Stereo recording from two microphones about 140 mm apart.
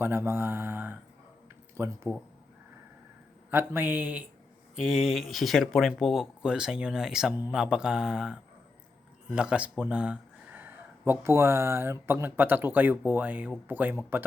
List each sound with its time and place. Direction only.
0.0 s mantra: 15° right (ahead or behind)
1.7 s speech: 15° right (ahead or behind)
3.5 s mantra: 15° right (ahead or behind)
4.8 s speech: 5° right (ahead or behind)
13.1 s mantra: 10° right (ahead or behind)